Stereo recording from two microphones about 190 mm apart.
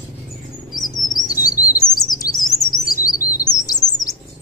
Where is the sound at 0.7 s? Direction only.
20° left (ahead or behind).